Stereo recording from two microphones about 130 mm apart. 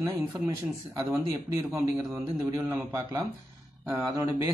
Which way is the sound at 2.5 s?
20° right (ahead or behind).